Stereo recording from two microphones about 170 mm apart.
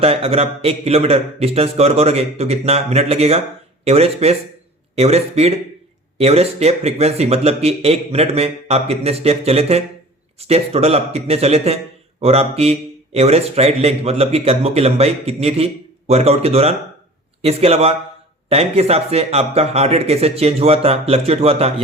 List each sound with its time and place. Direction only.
0.0 s speech: 35° right (ahead or behind)